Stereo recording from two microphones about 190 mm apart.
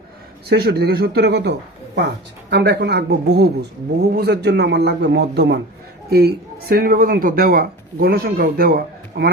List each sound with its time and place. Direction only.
0.4 s a man's voice: 55° right (ahead or behind)